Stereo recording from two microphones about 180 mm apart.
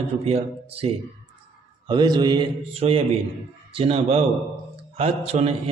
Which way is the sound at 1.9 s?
25° right (ahead or behind).